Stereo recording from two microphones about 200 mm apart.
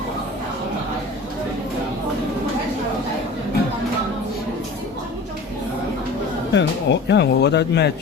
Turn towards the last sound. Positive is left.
turn(degrees=60)  # may be behind; listen again after turning